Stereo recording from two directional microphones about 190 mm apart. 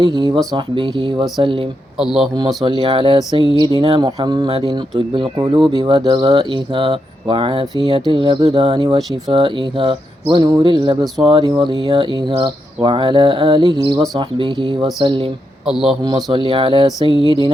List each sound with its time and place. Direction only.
0.1 s speech: 20° right (ahead or behind)
2.0 s a man's voice: centre (ahead or behind)
2.6 s speech: 25° right (ahead or behind)
15.6 s a man's voice: centre (ahead or behind)
16.0 s speech: 25° right (ahead or behind)